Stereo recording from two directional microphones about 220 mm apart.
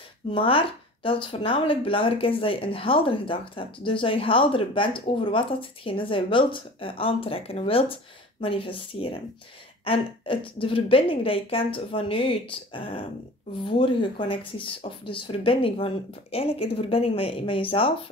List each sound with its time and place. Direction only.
0.3 s speech: 25° left (ahead or behind)